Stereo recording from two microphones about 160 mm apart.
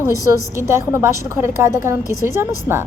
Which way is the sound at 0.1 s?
20° left (ahead or behind).